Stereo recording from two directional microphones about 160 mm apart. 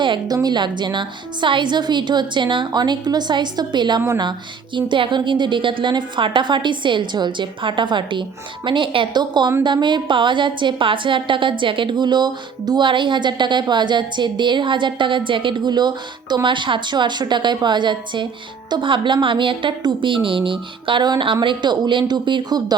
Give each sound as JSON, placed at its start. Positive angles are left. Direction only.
{"t": 0.0, "sound": "a woman's voice", "side_deg": -30}
{"t": 4.0, "sound": "a woman's voice", "side_deg": -15}
{"t": 4.3, "sound": "a woman's voice", "side_deg": -30}